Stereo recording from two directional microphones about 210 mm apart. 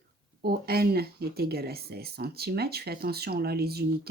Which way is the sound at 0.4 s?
50° right (ahead or behind).